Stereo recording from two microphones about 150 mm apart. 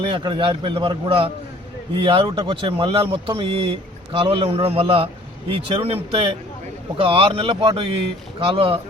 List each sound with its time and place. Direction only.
0.0 s speech: 35° right (ahead or behind)